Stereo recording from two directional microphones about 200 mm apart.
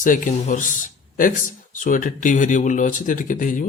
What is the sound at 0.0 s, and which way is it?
Speech, 40° left (ahead or behind).